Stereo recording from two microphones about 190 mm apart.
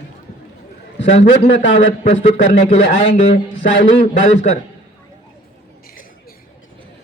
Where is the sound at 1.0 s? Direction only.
35° left (ahead or behind).